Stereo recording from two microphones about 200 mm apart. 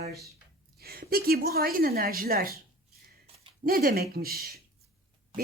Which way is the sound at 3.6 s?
45° right (ahead or behind).